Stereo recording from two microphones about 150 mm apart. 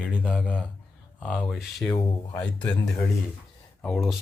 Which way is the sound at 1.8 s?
15° left (ahead or behind).